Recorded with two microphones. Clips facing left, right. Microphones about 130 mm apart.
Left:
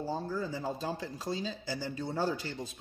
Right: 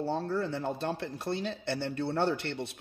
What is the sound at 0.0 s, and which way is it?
Speech, 70° right (ahead or behind).